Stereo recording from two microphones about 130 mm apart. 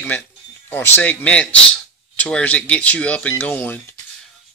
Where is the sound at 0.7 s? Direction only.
15° left (ahead or behind).